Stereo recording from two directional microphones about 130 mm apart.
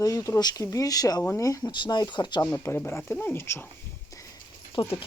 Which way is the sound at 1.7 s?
35° left (ahead or behind).